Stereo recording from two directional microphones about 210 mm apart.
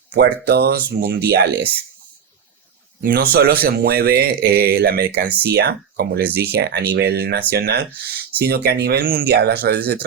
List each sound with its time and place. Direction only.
0.1 s a man's voice: 50° right (ahead or behind)
3.0 s a man's voice: 45° right (ahead or behind)